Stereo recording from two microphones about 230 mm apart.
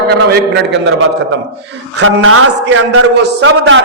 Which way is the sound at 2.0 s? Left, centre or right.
Right.